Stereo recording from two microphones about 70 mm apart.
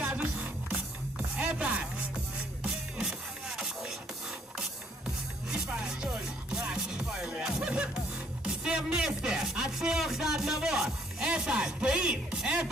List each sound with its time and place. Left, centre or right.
0.0 s music: centre
3.0 s music: centre
5.5 s music: centre